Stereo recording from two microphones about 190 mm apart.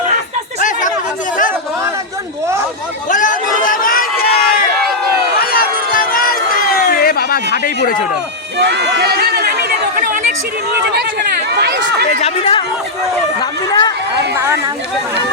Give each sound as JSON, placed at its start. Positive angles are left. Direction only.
{"t": 0.6, "sound": "chatter", "side_deg": 40}
{"t": 3.1, "sound": "run", "side_deg": 45}
{"t": 5.4, "sound": "crowd", "side_deg": 50}
{"t": 6.7, "sound": "a sound", "side_deg": 50}
{"t": 8.5, "sound": "chatter", "side_deg": -65}
{"t": 10.8, "sound": "speech", "side_deg": -60}
{"t": 12.0, "sound": "speech", "side_deg": 30}
{"t": 14.3, "sound": "speech", "side_deg": -15}